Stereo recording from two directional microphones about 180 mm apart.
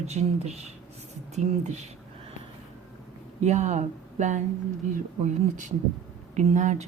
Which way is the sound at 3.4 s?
40° right (ahead or behind).